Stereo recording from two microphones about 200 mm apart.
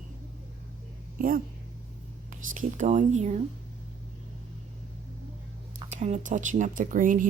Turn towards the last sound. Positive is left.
turn(degrees=-40)  # may be behind; listen again after turning